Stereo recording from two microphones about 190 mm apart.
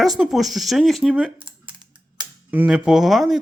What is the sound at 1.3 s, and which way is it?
Computer keyboard, 25° right (ahead or behind).